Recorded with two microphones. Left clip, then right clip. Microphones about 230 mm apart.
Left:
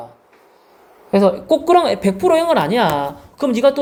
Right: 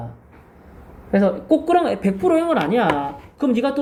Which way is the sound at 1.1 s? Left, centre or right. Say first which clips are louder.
Left 4 dB; left.